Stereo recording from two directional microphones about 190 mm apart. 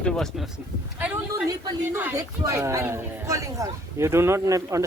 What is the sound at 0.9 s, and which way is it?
A man's voice, 10° right (ahead or behind).